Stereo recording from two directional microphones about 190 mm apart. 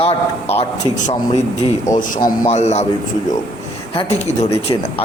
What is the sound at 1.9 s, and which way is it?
Speech, 15° left (ahead or behind).